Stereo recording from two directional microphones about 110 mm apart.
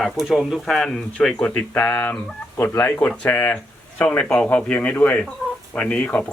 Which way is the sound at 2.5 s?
25° left (ahead or behind).